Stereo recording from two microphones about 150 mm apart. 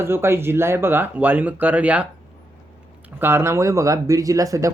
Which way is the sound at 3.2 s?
15° right (ahead or behind).